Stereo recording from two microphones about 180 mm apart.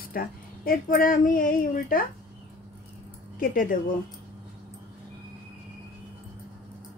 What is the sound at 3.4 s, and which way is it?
Speech, 50° left (ahead or behind).